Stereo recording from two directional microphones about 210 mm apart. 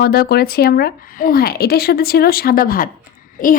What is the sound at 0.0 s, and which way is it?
A woman's voice, 45° left (ahead or behind).